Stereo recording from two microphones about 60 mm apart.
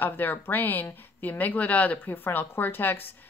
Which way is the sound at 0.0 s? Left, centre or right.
Left.